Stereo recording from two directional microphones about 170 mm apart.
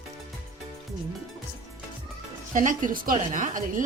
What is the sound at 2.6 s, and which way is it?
A woman's voice, 50° right (ahead or behind).